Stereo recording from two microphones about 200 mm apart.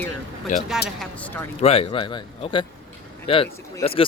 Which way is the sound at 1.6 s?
30° left (ahead or behind).